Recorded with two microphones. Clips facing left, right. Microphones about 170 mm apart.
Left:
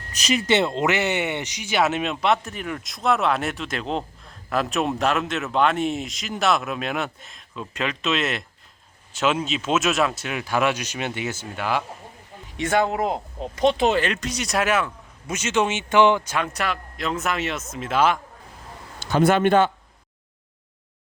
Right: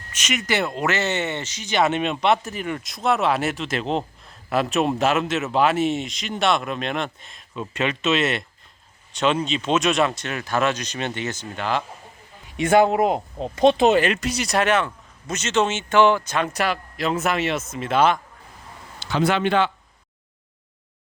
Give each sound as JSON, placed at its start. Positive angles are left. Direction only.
{"t": 0.1, "sound": "speech", "side_deg": 35}
{"t": 12.9, "sound": "speech", "side_deg": -20}
{"t": 14.0, "sound": "speech", "side_deg": -5}
{"t": 16.5, "sound": "speech", "side_deg": -5}
{"t": 18.9, "sound": "a man's voice", "side_deg": 50}